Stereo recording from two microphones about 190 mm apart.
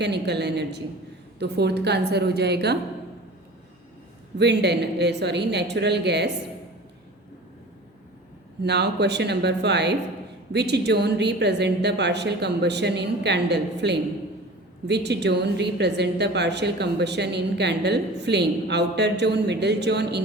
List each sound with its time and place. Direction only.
0.0 s a woman's voice: 60° right (ahead or behind)
4.4 s a woman's voice: 60° right (ahead or behind)
8.6 s a woman's voice: 60° right (ahead or behind)